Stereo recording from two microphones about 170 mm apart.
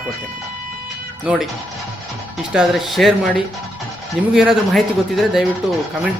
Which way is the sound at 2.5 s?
Centre (ahead or behind).